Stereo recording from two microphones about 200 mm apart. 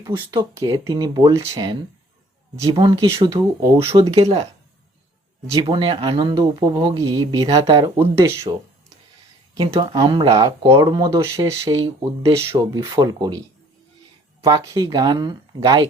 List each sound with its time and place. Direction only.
0.3 s speech: 20° right (ahead or behind)
5.5 s speech: 25° right (ahead or behind)
9.6 s speech: 20° right (ahead or behind)
14.4 s speech: 15° right (ahead or behind)